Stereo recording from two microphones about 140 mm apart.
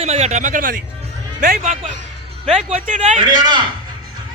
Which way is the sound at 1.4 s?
90° right.